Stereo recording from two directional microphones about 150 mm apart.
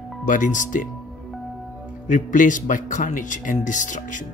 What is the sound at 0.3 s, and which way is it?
Speech, 60° left (ahead or behind).